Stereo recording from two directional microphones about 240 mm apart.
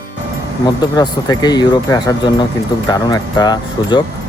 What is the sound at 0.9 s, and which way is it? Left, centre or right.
Speech, centre.